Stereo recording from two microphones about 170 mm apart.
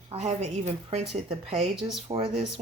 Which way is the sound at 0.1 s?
40° right (ahead or behind).